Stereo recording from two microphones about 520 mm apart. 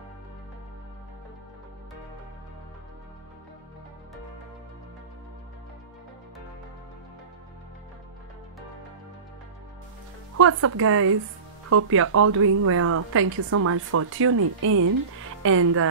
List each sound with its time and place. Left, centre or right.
10.3 s speech: right